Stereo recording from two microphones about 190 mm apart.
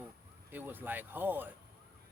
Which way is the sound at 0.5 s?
10° right (ahead or behind).